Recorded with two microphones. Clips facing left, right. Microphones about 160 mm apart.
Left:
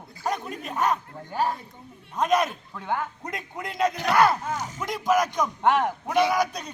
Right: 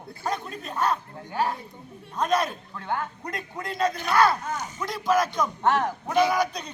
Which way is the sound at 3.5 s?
15° left (ahead or behind).